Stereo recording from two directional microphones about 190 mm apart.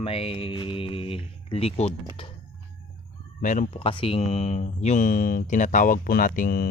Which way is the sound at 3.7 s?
30° left (ahead or behind).